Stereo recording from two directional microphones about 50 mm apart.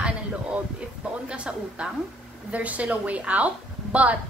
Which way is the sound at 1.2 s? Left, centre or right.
Centre.